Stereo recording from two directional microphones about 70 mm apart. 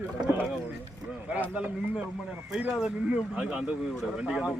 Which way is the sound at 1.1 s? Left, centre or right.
Centre.